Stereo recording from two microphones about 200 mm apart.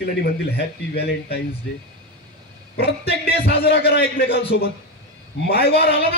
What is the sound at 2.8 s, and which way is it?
A man's voice, 50° left (ahead or behind).